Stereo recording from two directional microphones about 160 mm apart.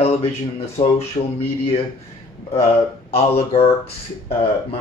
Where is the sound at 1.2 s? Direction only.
35° left (ahead or behind).